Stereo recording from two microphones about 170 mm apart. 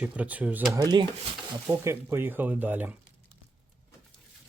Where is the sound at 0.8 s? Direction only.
25° right (ahead or behind); by 2.9 s 10° right (ahead or behind).